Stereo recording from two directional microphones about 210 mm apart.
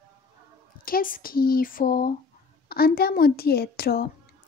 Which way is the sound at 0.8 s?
40° left (ahead or behind).